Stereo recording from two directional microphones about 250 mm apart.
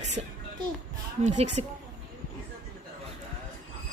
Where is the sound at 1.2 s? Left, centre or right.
Right.